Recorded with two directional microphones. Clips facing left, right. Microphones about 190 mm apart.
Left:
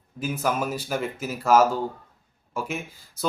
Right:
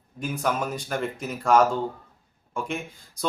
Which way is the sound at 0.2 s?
5° left (ahead or behind).